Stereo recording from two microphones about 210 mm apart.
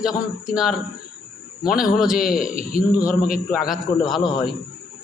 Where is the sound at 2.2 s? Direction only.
40° left (ahead or behind).